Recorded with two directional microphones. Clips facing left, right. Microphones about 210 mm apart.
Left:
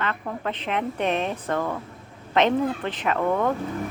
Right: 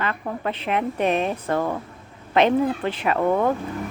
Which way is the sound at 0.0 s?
10° right (ahead or behind).